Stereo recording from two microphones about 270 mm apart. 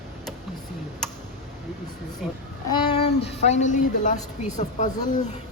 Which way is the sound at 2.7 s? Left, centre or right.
Centre.